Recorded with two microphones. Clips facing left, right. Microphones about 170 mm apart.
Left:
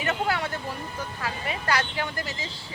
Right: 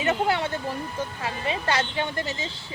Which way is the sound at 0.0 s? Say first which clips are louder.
Right 3 dB; 25° right (ahead or behind).